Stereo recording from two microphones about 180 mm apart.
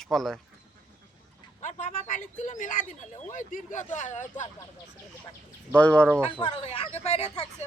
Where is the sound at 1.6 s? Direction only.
40° left (ahead or behind).